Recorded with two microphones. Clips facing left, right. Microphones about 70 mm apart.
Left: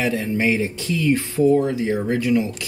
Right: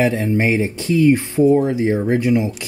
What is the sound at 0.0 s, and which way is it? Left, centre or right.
Speech, right.